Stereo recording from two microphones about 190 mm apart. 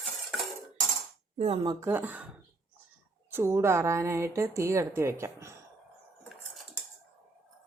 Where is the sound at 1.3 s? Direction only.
30° right (ahead or behind).